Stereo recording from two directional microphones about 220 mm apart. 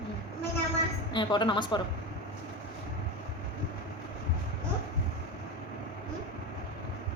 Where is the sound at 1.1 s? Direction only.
20° left (ahead or behind).